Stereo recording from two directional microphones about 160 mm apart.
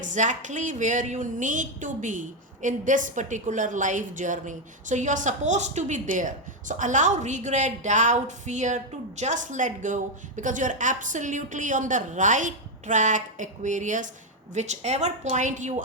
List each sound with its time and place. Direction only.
0.0 s a woman's voice: 50° right (ahead or behind)